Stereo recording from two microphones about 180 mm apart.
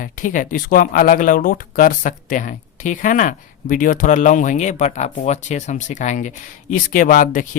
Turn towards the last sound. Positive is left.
turn(degrees=45)  # may be behind; listen again after turning